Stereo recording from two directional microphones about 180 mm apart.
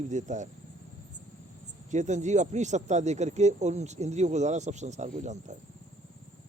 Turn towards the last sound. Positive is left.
turn(degrees=-40)  # may be behind; listen again after turning